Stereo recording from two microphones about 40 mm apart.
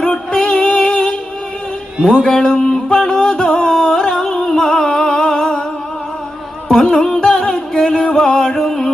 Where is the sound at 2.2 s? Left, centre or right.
Left.